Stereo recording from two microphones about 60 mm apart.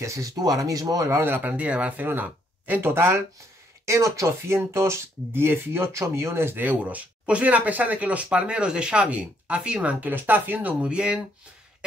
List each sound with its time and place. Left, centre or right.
0.0 s speech: right
1.2 s speech: right
3.8 s speech: right
10.9 s speech: centre